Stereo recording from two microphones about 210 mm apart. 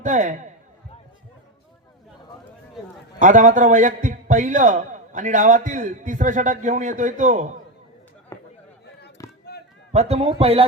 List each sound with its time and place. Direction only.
0.0 s a man's voice: 35° right (ahead or behind)
3.2 s a man's voice: 40° right (ahead or behind)
8.3 s a sound: 15° left (ahead or behind)
9.2 s basketball bounce: 15° left (ahead or behind)
9.9 s a man's voice: 30° right (ahead or behind)